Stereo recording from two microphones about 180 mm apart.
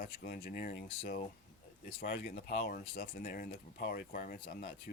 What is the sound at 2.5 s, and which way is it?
Speech, 60° left (ahead or behind).